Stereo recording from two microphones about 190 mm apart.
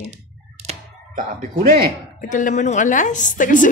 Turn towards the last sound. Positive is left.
turn(degrees=45)  # may be behind; listen again after turning